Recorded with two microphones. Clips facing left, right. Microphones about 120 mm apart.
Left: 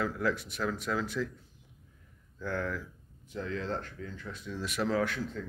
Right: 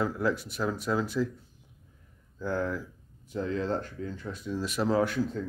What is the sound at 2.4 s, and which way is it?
Speech, 30° right (ahead or behind).